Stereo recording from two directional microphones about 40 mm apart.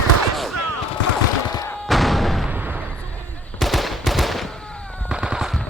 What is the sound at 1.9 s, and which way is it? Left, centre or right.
Artillery fire, centre.